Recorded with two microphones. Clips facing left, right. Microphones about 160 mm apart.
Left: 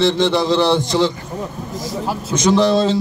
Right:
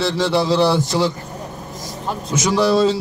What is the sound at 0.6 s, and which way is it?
Speech, 5° right (ahead or behind).